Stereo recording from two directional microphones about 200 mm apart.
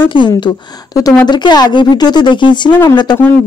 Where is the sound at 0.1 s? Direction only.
25° left (ahead or behind).